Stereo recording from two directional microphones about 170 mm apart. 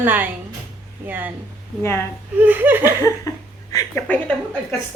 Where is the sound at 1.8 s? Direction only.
15° left (ahead or behind).